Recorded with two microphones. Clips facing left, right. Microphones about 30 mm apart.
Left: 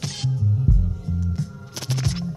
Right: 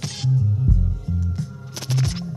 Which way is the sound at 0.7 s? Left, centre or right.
Left.